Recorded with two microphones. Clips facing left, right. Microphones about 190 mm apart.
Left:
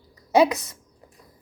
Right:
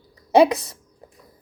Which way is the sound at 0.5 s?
35° right (ahead or behind).